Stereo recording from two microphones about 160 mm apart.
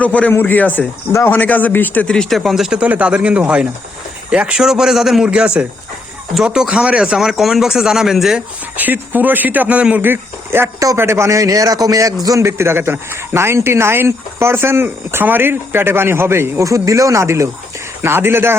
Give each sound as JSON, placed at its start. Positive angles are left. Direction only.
{"t": 0.0, "sound": "a man's voice", "side_deg": 10}